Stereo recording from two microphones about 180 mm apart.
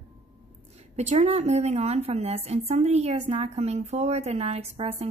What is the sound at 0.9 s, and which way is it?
A woman's voice, 40° right (ahead or behind).